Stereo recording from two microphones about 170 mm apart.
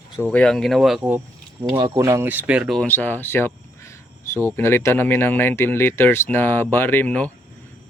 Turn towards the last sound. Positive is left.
turn(degrees=10)  # may be behind; listen again after turning